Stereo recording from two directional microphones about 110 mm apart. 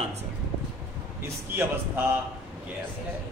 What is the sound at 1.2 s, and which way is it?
Speech, 20° right (ahead or behind).